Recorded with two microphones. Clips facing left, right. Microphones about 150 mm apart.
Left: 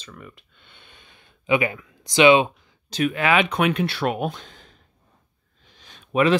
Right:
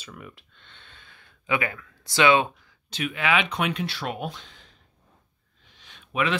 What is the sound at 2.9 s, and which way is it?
Speech, 45° left (ahead or behind).